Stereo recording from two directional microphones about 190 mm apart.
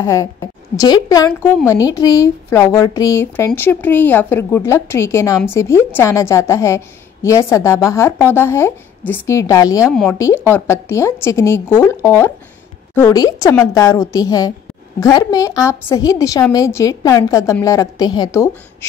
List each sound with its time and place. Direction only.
0.0 s a woman's voice: 15° left (ahead or behind)